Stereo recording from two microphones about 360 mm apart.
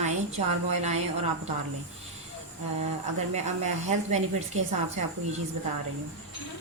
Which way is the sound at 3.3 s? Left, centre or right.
Centre.